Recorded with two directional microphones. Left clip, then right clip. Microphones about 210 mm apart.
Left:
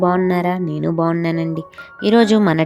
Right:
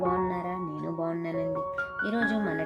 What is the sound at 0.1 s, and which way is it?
Speech, 50° left (ahead or behind).